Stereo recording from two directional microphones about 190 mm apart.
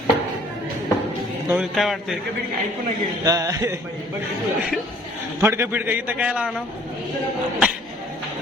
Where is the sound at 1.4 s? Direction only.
5° right (ahead or behind).